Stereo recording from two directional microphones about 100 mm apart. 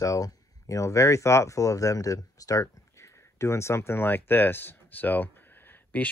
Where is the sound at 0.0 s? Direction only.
35° left (ahead or behind).